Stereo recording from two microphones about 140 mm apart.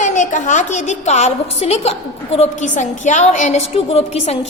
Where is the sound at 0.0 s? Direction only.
60° left (ahead or behind).